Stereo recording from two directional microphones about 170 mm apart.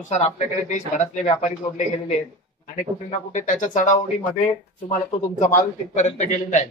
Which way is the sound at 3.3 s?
50° left (ahead or behind).